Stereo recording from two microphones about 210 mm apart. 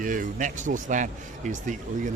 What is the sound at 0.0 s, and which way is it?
Speech, 40° right (ahead or behind).